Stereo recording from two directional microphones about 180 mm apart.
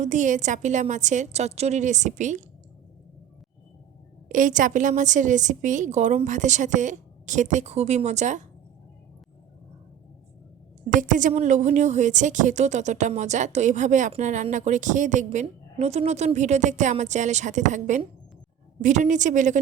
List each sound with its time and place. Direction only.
0.0 s a woman's voice: 40° right (ahead or behind)
4.3 s a woman's voice: 45° right (ahead or behind)
10.8 s a woman's voice: 45° right (ahead or behind)